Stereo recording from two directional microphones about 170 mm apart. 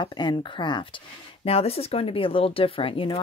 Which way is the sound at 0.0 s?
25° left (ahead or behind).